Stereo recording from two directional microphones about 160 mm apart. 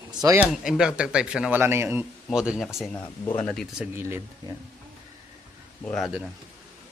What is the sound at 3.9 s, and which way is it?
Speech, 15° right (ahead or behind).